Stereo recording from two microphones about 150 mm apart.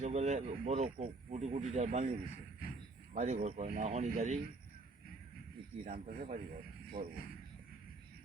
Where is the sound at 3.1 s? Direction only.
45° right (ahead or behind).